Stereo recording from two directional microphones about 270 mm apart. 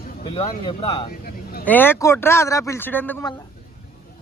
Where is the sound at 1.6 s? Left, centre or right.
Centre.